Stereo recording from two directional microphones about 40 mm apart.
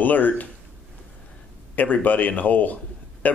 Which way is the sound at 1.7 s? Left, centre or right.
Left.